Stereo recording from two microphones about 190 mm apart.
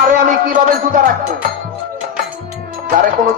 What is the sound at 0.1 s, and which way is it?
Speech, 45° right (ahead or behind).